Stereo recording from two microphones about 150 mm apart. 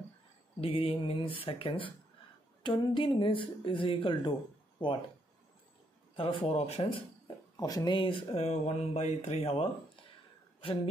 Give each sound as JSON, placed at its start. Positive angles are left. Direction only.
{"t": 0.6, "sound": "speech", "side_deg": 40}
{"t": 6.1, "sound": "speech", "side_deg": 40}
{"t": 7.5, "sound": "speech", "side_deg": 25}